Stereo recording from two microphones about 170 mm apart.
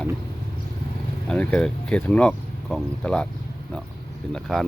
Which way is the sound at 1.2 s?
5° left (ahead or behind).